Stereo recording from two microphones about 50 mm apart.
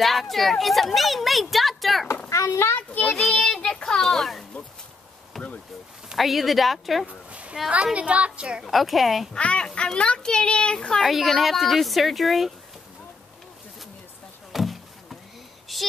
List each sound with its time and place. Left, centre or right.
0.0 s speech: centre
2.2 s a sound: left
2.9 s child singing: left
3.5 s a sound: centre
6.1 s speech: centre
7.1 s a sound: right
7.8 s a woman's voice: right
8.6 s speech: centre
9.3 s speech: left
11.0 s speech: centre
14.5 s a sound: centre
15.7 s child singing: centre